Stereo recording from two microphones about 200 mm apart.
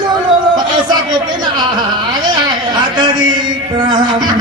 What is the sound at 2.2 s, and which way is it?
Speech, 20° right (ahead or behind).